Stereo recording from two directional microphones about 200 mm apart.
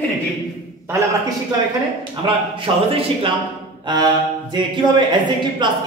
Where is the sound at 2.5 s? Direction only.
25° right (ahead or behind).